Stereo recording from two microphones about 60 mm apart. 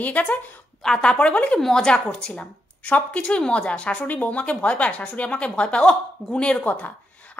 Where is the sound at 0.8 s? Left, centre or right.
Centre.